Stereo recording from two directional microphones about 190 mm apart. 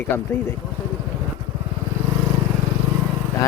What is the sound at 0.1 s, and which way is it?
Speech, 10° left (ahead or behind).